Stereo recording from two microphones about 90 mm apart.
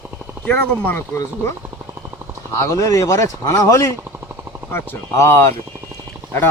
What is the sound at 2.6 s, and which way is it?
Speech, 35° left (ahead or behind).